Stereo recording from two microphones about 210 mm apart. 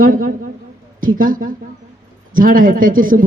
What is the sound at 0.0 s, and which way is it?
Speech, 40° right (ahead or behind).